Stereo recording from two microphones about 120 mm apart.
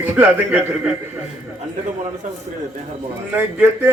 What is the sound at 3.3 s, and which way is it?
Speech, 20° right (ahead or behind).